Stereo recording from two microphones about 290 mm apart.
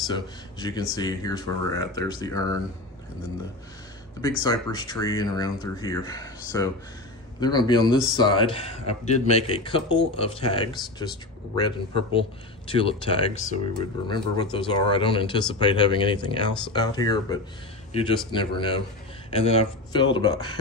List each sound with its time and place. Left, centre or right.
0.0 s speech: centre
4.4 s speech: centre